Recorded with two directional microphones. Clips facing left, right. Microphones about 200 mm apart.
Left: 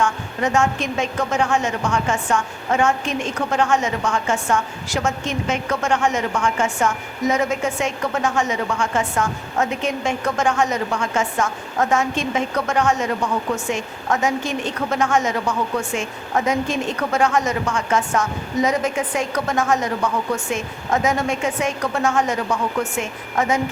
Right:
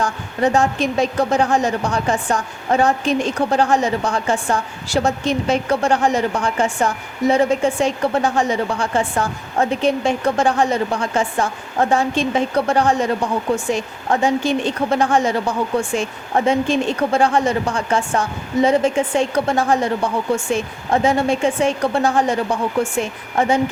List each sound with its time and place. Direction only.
0.0 s a woman's voice: 35° right (ahead or behind)